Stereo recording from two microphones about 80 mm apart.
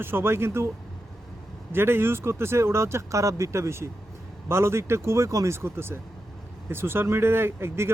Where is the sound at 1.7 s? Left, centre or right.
Right.